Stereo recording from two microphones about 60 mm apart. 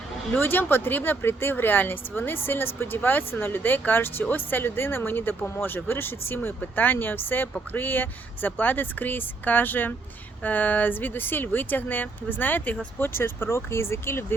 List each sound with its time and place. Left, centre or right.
0.3 s speech: left